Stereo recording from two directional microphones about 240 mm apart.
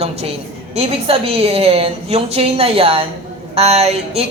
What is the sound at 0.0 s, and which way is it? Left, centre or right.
A woman's voice, right.